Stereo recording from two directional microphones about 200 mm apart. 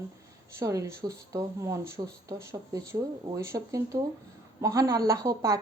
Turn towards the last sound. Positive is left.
turn(degrees=-15)  # may be behind; listen again after turning